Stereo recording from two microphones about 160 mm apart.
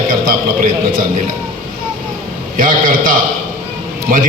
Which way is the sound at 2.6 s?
60° right (ahead or behind).